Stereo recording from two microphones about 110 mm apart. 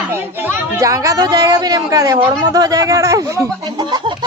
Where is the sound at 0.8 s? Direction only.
30° right (ahead or behind).